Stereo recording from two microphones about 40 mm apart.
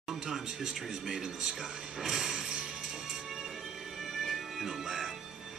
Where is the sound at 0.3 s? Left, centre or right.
Centre.